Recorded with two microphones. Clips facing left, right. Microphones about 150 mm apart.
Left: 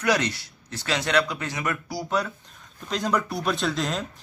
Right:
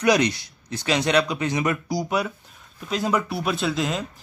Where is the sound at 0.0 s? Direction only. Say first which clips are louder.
Right 5 dB; 15° right (ahead or behind).